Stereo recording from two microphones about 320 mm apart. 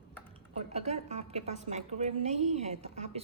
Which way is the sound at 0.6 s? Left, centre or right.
Centre.